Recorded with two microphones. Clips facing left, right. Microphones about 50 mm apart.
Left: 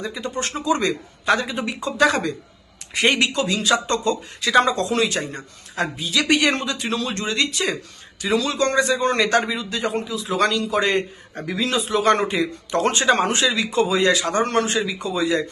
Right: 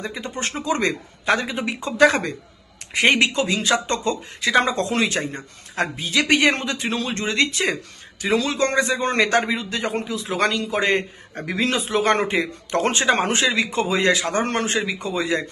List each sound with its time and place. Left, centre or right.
0.0 s a man's voice: right
1.2 s a man's voice: right
5.7 s a man's voice: right